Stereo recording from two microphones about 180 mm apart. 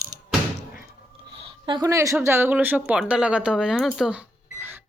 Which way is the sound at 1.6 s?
20° right (ahead or behind).